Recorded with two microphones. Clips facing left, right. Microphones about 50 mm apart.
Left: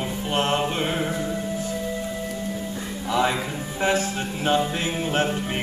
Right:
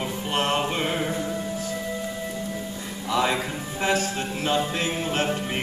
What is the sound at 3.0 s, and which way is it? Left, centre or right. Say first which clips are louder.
Speech: left 1 dB; left.